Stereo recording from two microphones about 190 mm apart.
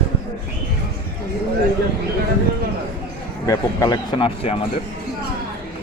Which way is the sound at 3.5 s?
20° left (ahead or behind).